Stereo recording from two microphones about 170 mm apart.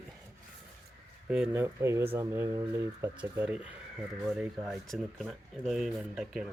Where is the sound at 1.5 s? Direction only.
15° right (ahead or behind).